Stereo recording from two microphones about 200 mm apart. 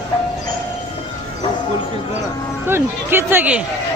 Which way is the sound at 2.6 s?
10° right (ahead or behind).